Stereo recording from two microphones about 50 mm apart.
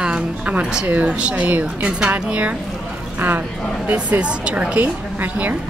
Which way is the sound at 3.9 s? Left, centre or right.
Right.